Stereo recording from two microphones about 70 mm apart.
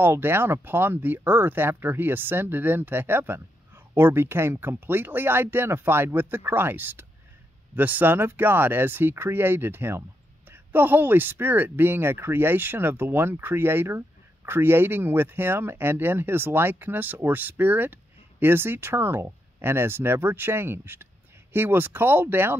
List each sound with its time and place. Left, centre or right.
0.0 s speech: right